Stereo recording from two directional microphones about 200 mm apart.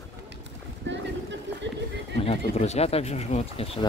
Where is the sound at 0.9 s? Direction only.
65° right (ahead or behind).